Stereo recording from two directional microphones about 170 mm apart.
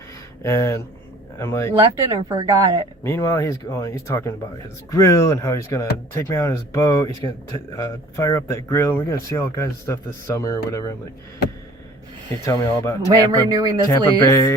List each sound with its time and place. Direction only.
0.4 s speech: 15° left (ahead or behind)
1.7 s speech: 20° right (ahead or behind)
3.0 s speech: 15° left (ahead or behind)
12.5 s speech: 20° left (ahead or behind)
13.5 s speech: 20° right (ahead or behind)
13.8 s speech: 20° left (ahead or behind)